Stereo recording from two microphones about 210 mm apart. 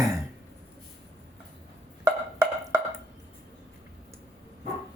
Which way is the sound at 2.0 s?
10° right (ahead or behind).